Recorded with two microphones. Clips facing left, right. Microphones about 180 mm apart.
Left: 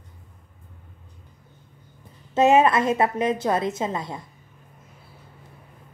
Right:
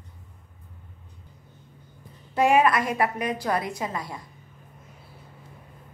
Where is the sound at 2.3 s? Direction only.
25° left (ahead or behind).